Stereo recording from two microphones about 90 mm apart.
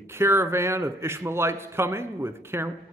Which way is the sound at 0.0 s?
30° right (ahead or behind).